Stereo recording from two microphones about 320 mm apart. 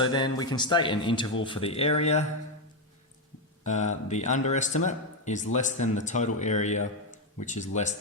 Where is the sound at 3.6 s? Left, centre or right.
Left.